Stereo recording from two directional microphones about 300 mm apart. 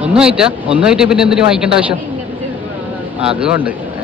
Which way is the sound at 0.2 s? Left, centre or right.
Centre.